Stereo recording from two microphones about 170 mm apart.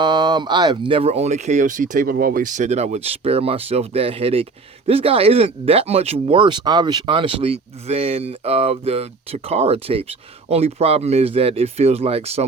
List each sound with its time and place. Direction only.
0.0 s speech: 25° right (ahead or behind)